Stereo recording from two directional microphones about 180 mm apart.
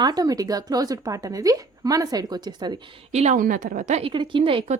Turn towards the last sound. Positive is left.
turn(degrees=-30)  # may be behind; listen again after turning